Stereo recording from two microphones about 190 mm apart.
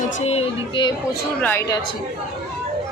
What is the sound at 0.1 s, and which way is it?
Speech, 30° left (ahead or behind).